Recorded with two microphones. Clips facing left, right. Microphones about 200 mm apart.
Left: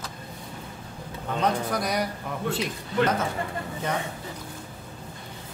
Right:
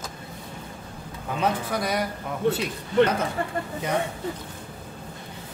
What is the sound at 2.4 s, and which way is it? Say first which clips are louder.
Speech: right 7 dB; 30° right (ahead or behind).